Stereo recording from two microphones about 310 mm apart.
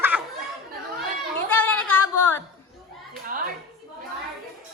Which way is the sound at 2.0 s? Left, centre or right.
Left.